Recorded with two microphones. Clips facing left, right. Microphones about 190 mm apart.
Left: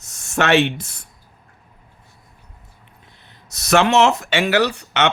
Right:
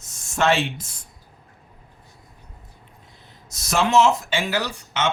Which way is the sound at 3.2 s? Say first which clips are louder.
Left 1 dB; 65° left (ahead or behind).